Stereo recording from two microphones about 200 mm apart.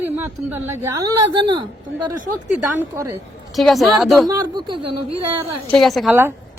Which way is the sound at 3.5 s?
Centre (ahead or behind).